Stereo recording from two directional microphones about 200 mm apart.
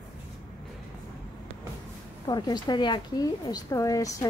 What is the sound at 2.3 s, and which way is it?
A woman's voice, 20° left (ahead or behind).